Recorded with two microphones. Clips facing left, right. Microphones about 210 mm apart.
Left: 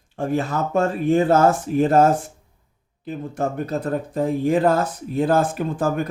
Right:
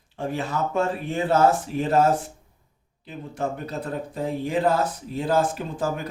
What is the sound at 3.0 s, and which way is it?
A man's voice, 50° left (ahead or behind).